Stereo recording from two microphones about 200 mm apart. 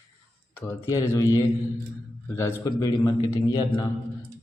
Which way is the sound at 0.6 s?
10° left (ahead or behind).